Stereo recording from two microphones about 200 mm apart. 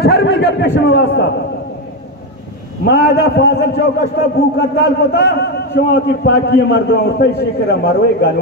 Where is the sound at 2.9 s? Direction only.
55° left (ahead or behind).